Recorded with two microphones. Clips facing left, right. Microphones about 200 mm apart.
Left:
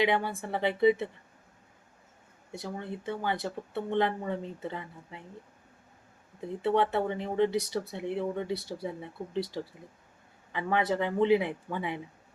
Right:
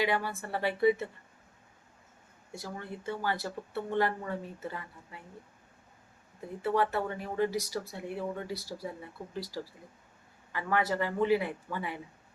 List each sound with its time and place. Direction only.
0.0 s speech: 20° left (ahead or behind)
2.5 s speech: 20° left (ahead or behind)
6.6 s speech: 25° left (ahead or behind)